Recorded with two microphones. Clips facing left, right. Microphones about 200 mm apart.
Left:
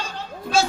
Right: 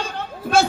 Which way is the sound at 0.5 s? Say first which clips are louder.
Right 3 dB; 55° right (ahead or behind).